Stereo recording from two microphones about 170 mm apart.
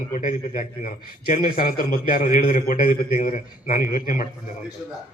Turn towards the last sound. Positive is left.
turn(degrees=55)  # may be behind; listen again after turning